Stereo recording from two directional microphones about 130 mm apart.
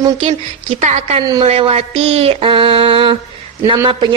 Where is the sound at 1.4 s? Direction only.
50° right (ahead or behind).